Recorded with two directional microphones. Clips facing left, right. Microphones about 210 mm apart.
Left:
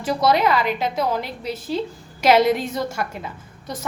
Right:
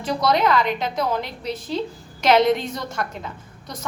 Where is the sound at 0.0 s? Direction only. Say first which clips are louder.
Left 1 dB; 5° left (ahead or behind).